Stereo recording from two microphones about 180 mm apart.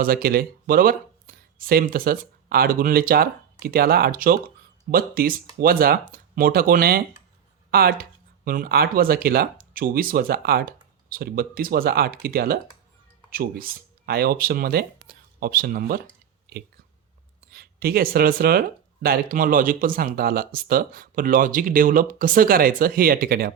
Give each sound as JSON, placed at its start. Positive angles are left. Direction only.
{"t": 0.0, "sound": "speech", "side_deg": -55}
{"t": 17.5, "sound": "speech", "side_deg": -55}